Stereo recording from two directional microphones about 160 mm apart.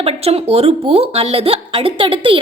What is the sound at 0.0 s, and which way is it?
A woman's voice, 40° right (ahead or behind).